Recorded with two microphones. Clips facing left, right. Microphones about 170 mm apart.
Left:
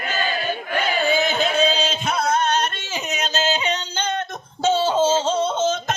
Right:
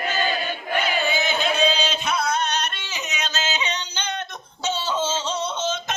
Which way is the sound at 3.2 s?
35° left (ahead or behind).